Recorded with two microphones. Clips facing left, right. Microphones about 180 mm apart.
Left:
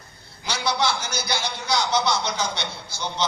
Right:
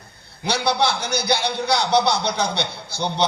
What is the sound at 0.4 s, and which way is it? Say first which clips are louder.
A man's voice: right 4 dB; 60° right (ahead or behind).